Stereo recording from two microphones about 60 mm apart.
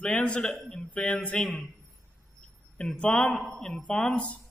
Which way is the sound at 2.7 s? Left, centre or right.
Centre.